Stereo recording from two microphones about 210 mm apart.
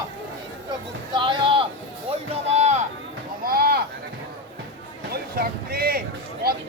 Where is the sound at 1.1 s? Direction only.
25° right (ahead or behind).